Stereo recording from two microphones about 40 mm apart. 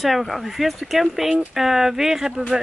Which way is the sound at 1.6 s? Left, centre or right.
Centre.